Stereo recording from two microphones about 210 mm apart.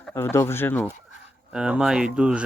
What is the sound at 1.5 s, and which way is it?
Speech, 5° right (ahead or behind).